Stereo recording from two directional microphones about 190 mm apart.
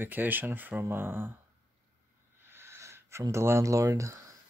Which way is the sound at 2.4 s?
10° right (ahead or behind).